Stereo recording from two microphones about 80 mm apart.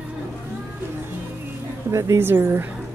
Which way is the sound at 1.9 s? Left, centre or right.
Right.